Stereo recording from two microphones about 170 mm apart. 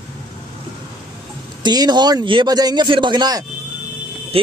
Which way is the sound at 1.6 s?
25° right (ahead or behind).